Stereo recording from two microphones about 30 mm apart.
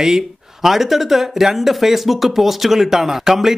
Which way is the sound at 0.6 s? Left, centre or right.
Centre.